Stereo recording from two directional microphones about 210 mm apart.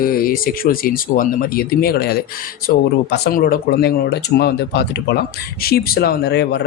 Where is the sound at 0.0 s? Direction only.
40° left (ahead or behind).